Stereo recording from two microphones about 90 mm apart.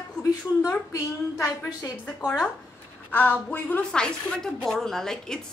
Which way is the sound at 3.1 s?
20° left (ahead or behind).